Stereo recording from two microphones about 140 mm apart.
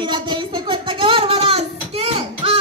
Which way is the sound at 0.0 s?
35° right (ahead or behind).